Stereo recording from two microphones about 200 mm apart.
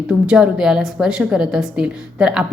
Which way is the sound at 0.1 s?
5° right (ahead or behind).